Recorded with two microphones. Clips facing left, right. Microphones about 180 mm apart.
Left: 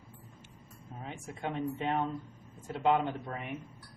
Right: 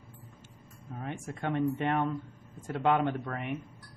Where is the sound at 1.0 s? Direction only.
60° right (ahead or behind).